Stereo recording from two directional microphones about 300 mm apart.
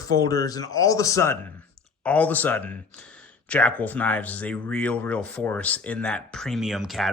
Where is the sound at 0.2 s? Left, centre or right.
Centre.